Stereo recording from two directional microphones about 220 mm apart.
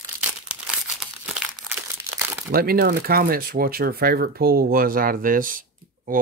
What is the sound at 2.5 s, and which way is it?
Speech, 45° right (ahead or behind).